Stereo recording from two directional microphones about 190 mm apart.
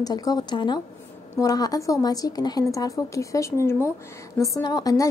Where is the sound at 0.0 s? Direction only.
20° left (ahead or behind).